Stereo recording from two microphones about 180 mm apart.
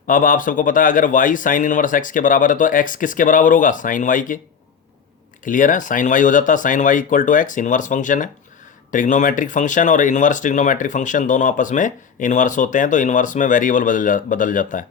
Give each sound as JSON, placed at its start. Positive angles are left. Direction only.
{"t": 0.1, "sound": "speech", "side_deg": 50}
{"t": 5.5, "sound": "speech", "side_deg": 45}